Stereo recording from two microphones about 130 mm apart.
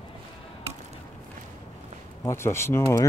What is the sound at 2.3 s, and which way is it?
Speech, 20° left (ahead or behind).